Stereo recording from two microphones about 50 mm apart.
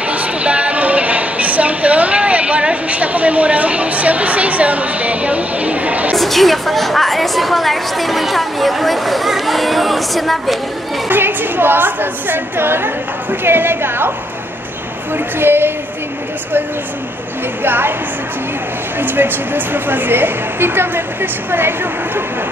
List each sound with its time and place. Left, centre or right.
0.0 s music: right
6.1 s a woman's voice: centre
11.1 s a woman's voice: right
15.1 s a woman's voice: right
17.6 s a woman's voice: right
18.9 s a woman's voice: right